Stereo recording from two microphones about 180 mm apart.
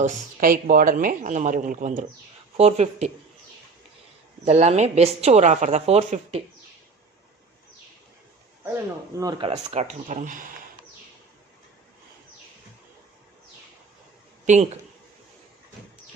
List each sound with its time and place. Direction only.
0.0 s a woman's voice: 45° right (ahead or behind)
4.4 s a woman's voice: 35° right (ahead or behind)
9.1 s speech: 25° right (ahead or behind)
10.1 s speech: 45° right (ahead or behind)
14.4 s speech: 40° right (ahead or behind)